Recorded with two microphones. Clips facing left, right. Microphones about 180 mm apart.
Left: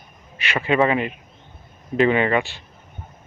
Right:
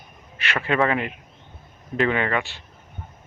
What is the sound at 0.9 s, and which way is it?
Speech, 15° left (ahead or behind).